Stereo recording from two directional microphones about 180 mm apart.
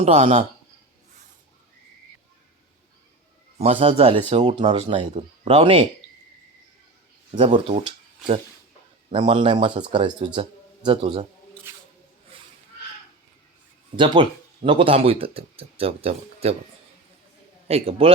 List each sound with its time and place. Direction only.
0.0 s speech: 40° right (ahead or behind)
3.6 s speech: 35° right (ahead or behind)
7.3 s speech: 30° right (ahead or behind)
11.7 s squish: 15° right (ahead or behind)
13.9 s speech: 25° right (ahead or behind)
17.7 s speech: 35° right (ahead or behind)